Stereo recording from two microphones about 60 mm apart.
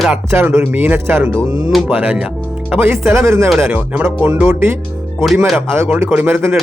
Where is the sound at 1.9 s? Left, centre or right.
Right.